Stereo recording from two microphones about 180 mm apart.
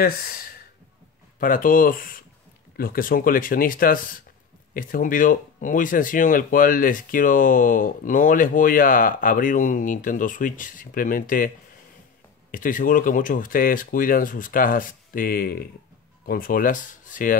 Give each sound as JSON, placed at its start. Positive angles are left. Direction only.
{"t": 1.4, "sound": "speech", "side_deg": 50}